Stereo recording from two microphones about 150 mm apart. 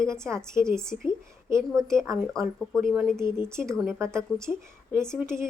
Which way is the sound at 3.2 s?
15° right (ahead or behind).